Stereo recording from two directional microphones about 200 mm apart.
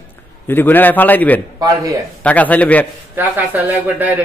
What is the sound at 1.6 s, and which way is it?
Speech, 15° right (ahead or behind).